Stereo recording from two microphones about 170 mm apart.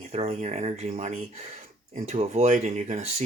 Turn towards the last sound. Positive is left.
turn(degrees=-40)  # may be behind; listen again after turning